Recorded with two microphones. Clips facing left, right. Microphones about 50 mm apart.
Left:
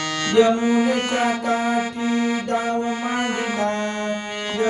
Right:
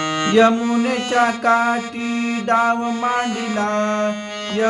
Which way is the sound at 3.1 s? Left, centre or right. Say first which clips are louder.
Right 2 dB; right.